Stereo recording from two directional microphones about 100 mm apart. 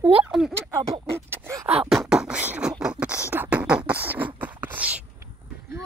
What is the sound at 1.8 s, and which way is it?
Beatboxing, centre (ahead or behind).